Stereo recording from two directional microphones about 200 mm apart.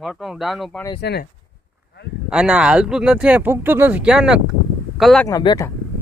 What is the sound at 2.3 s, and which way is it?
Speech, 5° right (ahead or behind).